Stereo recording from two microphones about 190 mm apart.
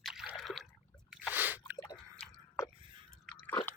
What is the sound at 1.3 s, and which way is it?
Squish, 10° right (ahead or behind).